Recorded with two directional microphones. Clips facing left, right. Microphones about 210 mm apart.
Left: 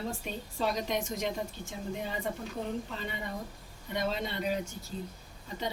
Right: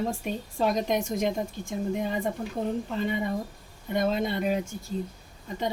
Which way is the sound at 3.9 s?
50° right (ahead or behind).